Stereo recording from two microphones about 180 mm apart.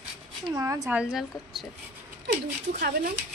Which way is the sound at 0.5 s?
20° right (ahead or behind).